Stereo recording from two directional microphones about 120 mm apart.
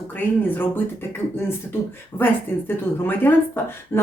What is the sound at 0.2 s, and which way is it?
Speech, 15° left (ahead or behind).